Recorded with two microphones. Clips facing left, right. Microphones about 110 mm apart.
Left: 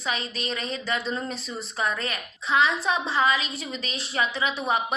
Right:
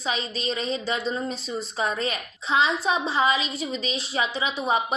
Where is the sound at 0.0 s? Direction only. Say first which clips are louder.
Right 2 dB; 25° right (ahead or behind).